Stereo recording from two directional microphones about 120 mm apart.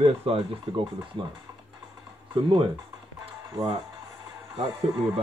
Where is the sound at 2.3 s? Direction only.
45° right (ahead or behind).